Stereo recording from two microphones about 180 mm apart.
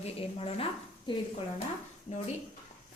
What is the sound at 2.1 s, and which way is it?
Speech, 40° left (ahead or behind).